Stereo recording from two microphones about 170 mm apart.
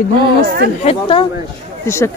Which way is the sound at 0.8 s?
30° left (ahead or behind).